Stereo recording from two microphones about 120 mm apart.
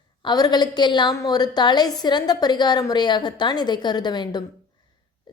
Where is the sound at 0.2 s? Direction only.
35° left (ahead or behind).